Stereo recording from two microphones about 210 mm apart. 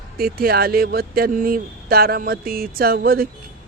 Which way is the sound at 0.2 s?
45° right (ahead or behind).